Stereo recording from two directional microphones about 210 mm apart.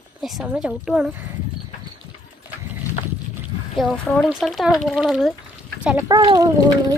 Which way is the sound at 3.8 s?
Centre (ahead or behind).